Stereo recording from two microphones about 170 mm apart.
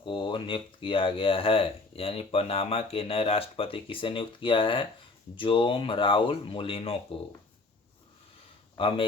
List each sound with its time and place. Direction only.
0.0 s speech: 30° left (ahead or behind)